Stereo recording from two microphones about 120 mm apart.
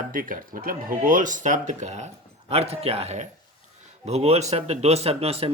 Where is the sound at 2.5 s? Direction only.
60° right (ahead or behind).